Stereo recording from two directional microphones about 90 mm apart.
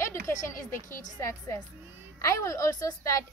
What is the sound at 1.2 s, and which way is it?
A woman's voice, 30° left (ahead or behind).